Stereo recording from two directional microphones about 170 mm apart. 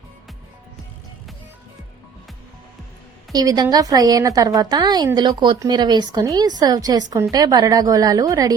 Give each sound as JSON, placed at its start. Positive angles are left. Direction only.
{"t": 3.3, "sound": "a woman's voice", "side_deg": -20}